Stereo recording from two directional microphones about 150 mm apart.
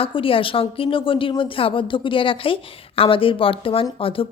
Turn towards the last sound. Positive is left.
turn(degrees=35)  # may be behind; listen again after turning